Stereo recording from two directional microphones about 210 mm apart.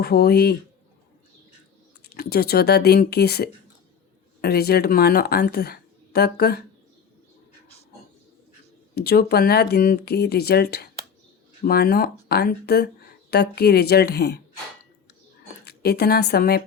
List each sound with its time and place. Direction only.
0.0 s speech: 50° left (ahead or behind)
2.0 s speech: 50° left (ahead or behind)
9.0 s speech: 50° left (ahead or behind)
15.6 s speech: 50° left (ahead or behind)